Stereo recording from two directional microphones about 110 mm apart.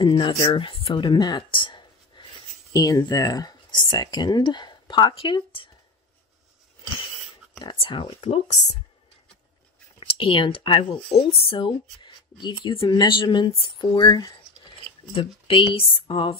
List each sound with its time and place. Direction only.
0.0 s speech: 50° left (ahead or behind)
2.7 s speech: 35° left (ahead or behind); by 5.7 s 55° left (ahead or behind)
7.5 s speech: 45° left (ahead or behind)
8.2 s speech: 80° left
9.9 s speech: 55° left (ahead or behind)
13.9 s a sound: 40° left (ahead or behind)
15.1 s speech: 55° left (ahead or behind)